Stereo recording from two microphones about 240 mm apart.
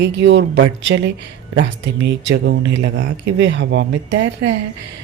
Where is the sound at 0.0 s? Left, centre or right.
Right.